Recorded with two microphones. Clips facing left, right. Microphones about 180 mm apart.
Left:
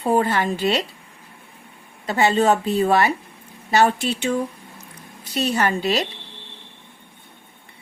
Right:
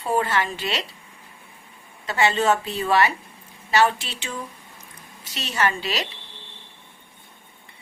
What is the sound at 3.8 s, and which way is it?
Speech, 45° left (ahead or behind).